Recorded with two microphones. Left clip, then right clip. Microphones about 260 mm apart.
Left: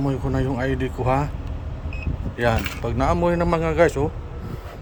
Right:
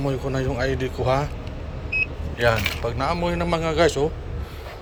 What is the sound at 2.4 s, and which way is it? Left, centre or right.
Speech, left.